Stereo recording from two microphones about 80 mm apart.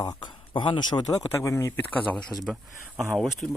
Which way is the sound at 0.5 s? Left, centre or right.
Left.